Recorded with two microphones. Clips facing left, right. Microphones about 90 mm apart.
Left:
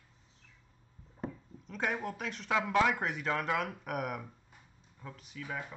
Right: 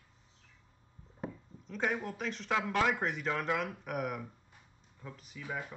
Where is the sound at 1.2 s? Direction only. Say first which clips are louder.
Left 1 dB; centre (ahead or behind).